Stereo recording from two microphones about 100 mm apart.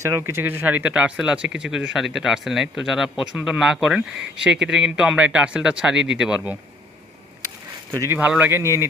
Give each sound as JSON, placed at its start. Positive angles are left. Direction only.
{"t": 0.0, "sound": "speech", "side_deg": -25}
{"t": 7.9, "sound": "speech", "side_deg": -35}
{"t": 8.2, "sound": "speech", "side_deg": -15}